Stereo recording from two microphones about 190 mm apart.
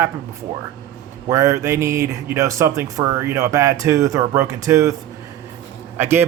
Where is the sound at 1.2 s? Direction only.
15° right (ahead or behind).